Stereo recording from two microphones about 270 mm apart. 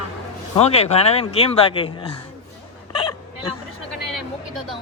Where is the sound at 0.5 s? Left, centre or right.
Left.